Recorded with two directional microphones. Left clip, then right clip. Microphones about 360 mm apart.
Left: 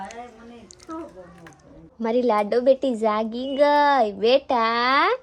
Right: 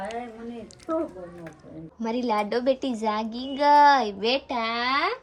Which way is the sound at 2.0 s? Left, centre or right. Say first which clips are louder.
Left 5 dB; centre.